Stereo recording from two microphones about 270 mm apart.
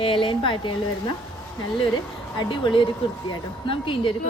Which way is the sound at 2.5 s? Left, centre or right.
Centre.